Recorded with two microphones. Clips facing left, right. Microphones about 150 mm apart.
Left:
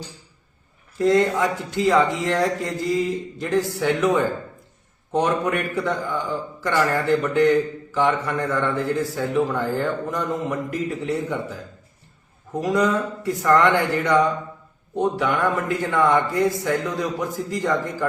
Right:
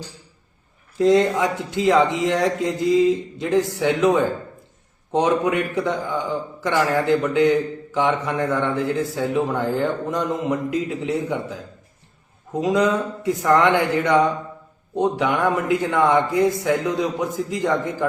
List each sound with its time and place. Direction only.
0.9 s a man's voice: 20° right (ahead or behind)